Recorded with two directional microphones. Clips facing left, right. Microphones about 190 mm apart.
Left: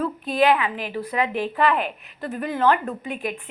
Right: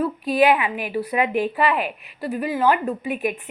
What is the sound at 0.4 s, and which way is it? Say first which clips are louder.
A woman's voice: even; 15° right (ahead or behind).